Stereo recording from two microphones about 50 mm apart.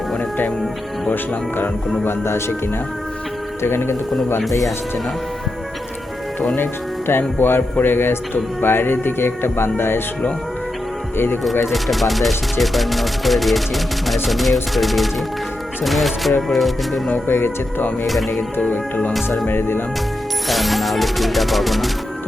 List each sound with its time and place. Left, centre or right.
1.1 s speech: left
2.0 s speech: left
3.6 s speech: left
7.1 s speech: left
11.7 s speech: centre
17.2 s speech: left
18.0 s speech: centre
19.5 s speech: left
20.5 s speech: centre